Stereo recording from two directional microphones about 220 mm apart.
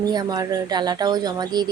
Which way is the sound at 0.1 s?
20° right (ahead or behind).